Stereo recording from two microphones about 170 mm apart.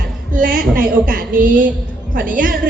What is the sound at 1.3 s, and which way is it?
Speech, 55° right (ahead or behind).